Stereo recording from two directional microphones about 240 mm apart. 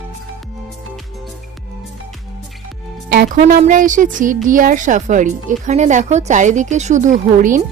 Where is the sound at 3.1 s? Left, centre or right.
Right.